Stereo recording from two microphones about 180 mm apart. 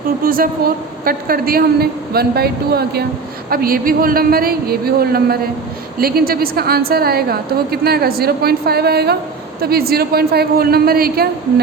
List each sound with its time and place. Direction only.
1.0 s a woman's voice: 55° right (ahead or behind)